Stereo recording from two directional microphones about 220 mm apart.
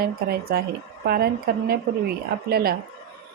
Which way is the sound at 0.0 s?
45° right (ahead or behind).